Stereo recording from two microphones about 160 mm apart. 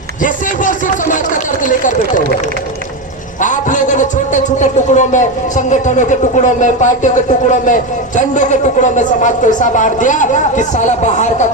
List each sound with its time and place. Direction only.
0.2 s speech: 55° left (ahead or behind)
3.4 s a man's voice: 50° left (ahead or behind)